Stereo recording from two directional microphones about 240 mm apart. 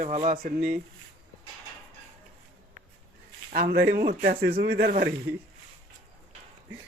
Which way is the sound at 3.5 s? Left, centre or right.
Right.